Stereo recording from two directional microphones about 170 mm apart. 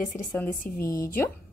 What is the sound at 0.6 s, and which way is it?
Speech, 55° left (ahead or behind).